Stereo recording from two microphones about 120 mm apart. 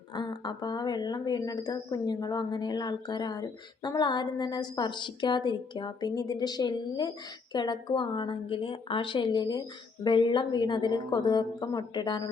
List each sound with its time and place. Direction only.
0.1 s a woman's voice: 40° left (ahead or behind)